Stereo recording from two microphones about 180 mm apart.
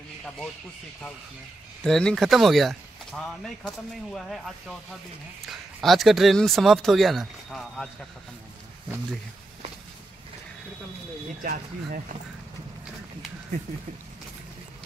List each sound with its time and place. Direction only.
1.8 s speech: 5° left (ahead or behind)
11.4 s speech: 50° right (ahead or behind)